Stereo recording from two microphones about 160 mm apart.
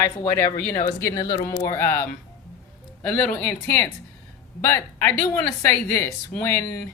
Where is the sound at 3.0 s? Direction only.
10° left (ahead or behind).